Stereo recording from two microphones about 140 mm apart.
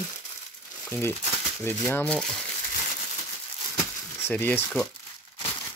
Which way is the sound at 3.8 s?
15° left (ahead or behind).